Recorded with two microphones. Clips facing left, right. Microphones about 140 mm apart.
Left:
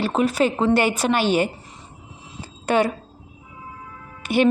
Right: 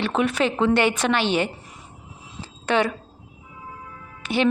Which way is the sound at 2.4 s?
45° left (ahead or behind).